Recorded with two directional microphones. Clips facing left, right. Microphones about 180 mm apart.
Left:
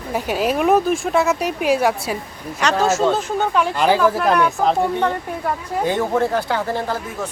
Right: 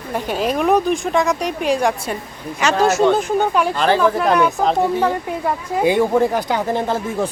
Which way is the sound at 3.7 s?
10° left (ahead or behind).